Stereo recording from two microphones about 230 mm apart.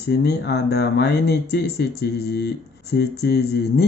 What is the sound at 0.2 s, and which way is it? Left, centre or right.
Speech, left.